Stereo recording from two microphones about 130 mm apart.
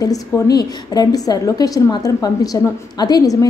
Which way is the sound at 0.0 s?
30° left (ahead or behind).